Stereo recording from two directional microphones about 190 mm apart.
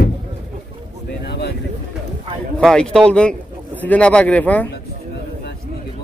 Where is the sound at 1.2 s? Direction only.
60° left (ahead or behind).